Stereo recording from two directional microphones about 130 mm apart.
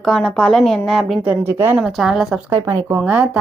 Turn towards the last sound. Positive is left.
turn(degrees=-10)  # may be behind; listen again after turning